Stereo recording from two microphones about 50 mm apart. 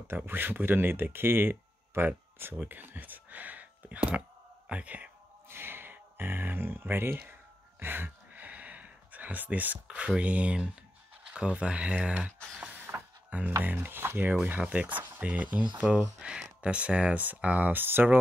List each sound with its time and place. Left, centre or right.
0.1 s speech: right
5.5 s speech: right
7.8 s a sound: right
8.4 s a sound: right
9.9 s speech: right
13.6 s speech: right
14.6 s speech: right